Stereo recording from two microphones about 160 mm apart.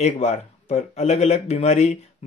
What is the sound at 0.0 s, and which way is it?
Speech, 40° left (ahead or behind).